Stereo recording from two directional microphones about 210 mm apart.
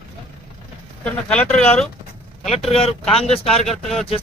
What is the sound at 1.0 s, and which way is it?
Speech, 5° left (ahead or behind).